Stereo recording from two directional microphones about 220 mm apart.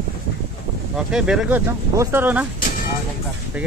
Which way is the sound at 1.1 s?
5° right (ahead or behind).